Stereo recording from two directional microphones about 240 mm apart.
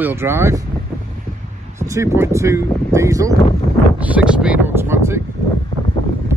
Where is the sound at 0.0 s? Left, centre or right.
Centre.